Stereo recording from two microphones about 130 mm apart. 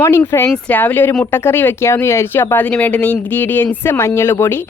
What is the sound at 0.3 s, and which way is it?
Speech, 20° left (ahead or behind).